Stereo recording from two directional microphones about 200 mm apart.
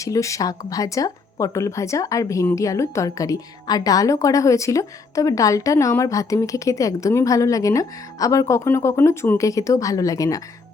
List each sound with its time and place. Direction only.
0.0 s speech: 15° left (ahead or behind)